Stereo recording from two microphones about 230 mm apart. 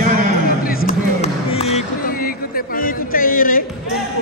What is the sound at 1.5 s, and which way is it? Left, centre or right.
Music, left.